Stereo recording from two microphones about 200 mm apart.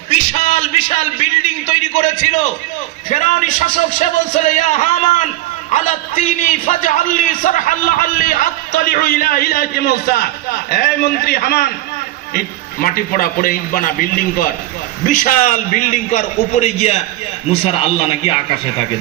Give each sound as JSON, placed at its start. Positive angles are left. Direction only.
{"t": 0.1, "sound": "a sound", "side_deg": 35}
{"t": 3.1, "sound": "a man's voice", "side_deg": 35}
{"t": 12.8, "sound": "a man's voice", "side_deg": 45}